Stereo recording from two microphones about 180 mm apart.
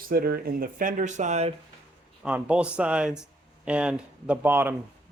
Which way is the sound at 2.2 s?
5° right (ahead or behind).